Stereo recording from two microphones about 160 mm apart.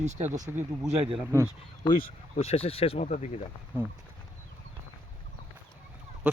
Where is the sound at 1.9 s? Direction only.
60° left (ahead or behind).